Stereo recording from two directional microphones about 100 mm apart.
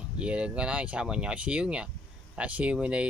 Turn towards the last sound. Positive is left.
turn(degrees=-10)  # may be behind; listen again after turning